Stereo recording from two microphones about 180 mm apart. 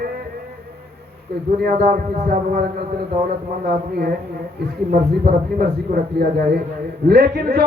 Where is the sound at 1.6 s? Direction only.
50° right (ahead or behind).